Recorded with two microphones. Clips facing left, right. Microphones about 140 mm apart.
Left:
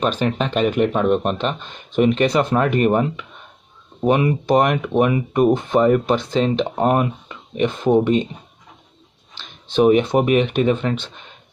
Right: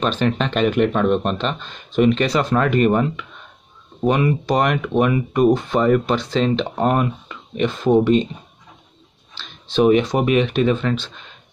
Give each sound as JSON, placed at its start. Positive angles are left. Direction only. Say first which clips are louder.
{"t": 0.0, "sound": "speech", "louder": "even", "side_deg": 10}
{"t": 9.8, "sound": "speech", "louder": "left 1 dB", "side_deg": 15}